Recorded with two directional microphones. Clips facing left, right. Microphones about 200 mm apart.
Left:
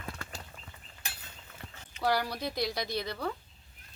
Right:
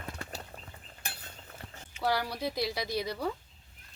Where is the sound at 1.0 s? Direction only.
55° right (ahead or behind).